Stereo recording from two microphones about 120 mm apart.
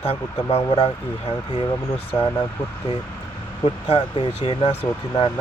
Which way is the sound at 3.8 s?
50° left (ahead or behind).